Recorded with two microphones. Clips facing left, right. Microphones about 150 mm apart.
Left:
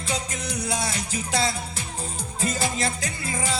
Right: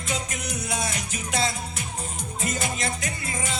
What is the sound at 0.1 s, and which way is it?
Music, 30° left (ahead or behind).